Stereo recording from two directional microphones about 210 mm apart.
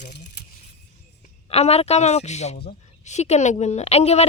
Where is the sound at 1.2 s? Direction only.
30° left (ahead or behind).